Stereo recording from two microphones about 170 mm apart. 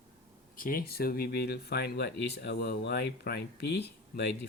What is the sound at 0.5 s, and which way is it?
Speech, 55° left (ahead or behind).